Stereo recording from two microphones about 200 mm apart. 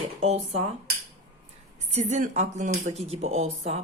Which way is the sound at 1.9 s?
35° right (ahead or behind).